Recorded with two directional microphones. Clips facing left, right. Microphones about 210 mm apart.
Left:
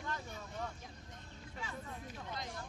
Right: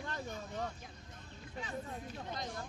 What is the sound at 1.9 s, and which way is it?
Speech, 40° right (ahead or behind).